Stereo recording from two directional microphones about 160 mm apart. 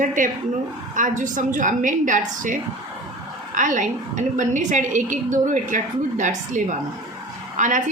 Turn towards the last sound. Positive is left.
turn(degrees=-55)  # may be behind; listen again after turning